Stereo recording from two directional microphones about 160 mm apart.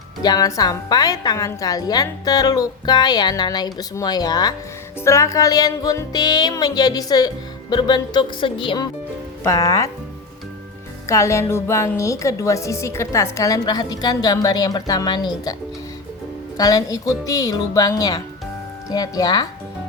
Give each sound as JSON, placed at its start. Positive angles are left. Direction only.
{"t": 0.2, "sound": "a woman's voice", "side_deg": 25}
{"t": 9.4, "sound": "a woman's voice", "side_deg": 20}
{"t": 11.0, "sound": "a woman's voice", "side_deg": 20}
{"t": 16.6, "sound": "a woman's voice", "side_deg": 20}